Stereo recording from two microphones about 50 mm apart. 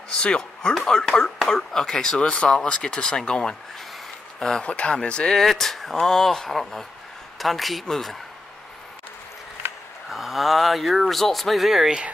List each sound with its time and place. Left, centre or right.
0.4 s speech: centre
5.4 s speech: centre
10.0 s speech: centre